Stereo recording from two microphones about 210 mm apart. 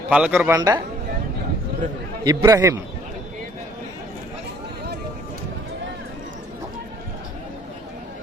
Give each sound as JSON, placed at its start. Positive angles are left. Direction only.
{"t": 0.1, "sound": "a man's voice", "side_deg": -5}
{"t": 2.2, "sound": "a man's voice", "side_deg": -15}